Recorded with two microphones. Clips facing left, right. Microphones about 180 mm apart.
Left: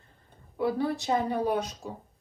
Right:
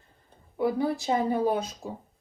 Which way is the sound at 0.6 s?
25° right (ahead or behind).